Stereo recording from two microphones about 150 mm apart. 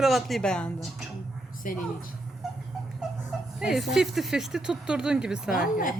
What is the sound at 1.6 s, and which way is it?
Speech, 65° left (ahead or behind).